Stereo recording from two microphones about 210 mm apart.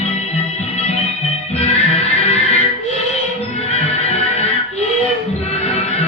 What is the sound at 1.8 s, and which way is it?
Music, 30° left (ahead or behind).